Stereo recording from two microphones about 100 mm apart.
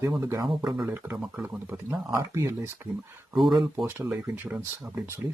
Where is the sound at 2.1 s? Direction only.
30° right (ahead or behind).